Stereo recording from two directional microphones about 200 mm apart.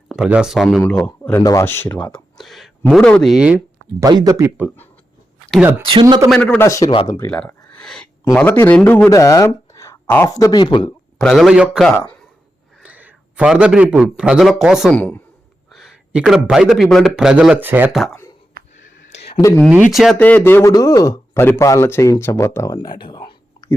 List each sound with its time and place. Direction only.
0.1 s a man's voice: 5° right (ahead or behind)
4.0 s speech: 20° right (ahead or behind)
5.8 s a man's voice: 25° right (ahead or behind)
6.3 s speech: 5° left (ahead or behind)
7.1 s a sound: 10° left (ahead or behind)
8.3 s speech: 5° left (ahead or behind); by 10.9 s 25° left (ahead or behind)
11.2 s a man's voice: centre (ahead or behind)
18.6 s a sound: 50° right (ahead or behind)
19.3 s speech: 15° left (ahead or behind)
19.9 s speech: centre (ahead or behind); by 23.7 s 20° left (ahead or behind)